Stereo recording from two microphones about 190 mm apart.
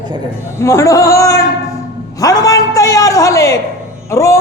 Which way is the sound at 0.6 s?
15° left (ahead or behind).